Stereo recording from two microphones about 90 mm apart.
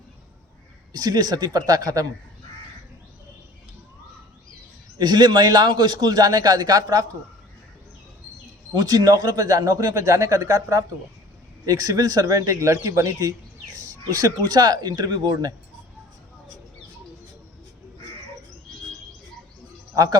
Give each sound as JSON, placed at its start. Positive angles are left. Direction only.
{"t": 0.9, "sound": "a man's voice", "side_deg": -45}
{"t": 4.9, "sound": "a man's voice", "side_deg": -50}
{"t": 8.7, "sound": "a man's voice", "side_deg": -45}
{"t": 19.9, "sound": "speech", "side_deg": -40}